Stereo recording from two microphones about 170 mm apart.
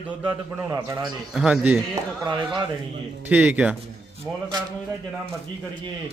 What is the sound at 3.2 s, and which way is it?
Speech, 10° right (ahead or behind).